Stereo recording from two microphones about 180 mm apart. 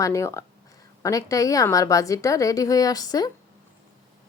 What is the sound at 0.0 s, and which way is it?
A woman's voice, 15° left (ahead or behind).